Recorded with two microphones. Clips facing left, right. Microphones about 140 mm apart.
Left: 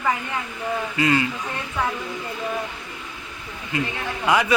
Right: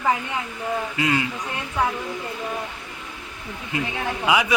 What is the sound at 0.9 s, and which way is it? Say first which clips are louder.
Speech: left 3 dB; 5° right (ahead or behind).